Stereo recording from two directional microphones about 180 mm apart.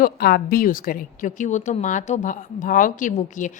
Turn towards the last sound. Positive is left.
turn(degrees=45)  # may be behind; listen again after turning